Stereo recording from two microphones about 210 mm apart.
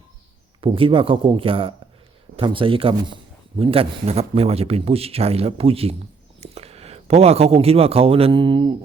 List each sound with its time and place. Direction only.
0.6 s speech: 25° right (ahead or behind)